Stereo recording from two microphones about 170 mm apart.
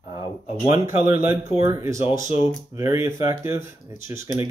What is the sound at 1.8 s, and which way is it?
Speech, 20° right (ahead or behind).